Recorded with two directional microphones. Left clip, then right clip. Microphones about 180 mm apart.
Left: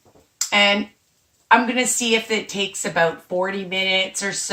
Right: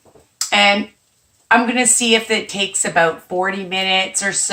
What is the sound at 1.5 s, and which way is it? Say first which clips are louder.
Speech: right 2 dB; 15° right (ahead or behind).